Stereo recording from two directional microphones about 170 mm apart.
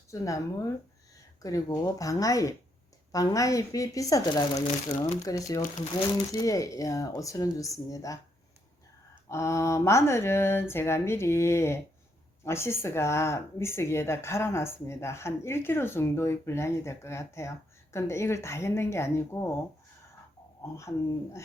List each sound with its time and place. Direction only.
0.1 s speech: 20° left (ahead or behind)
9.3 s speech: 15° left (ahead or behind)
20.6 s speech: 15° left (ahead or behind)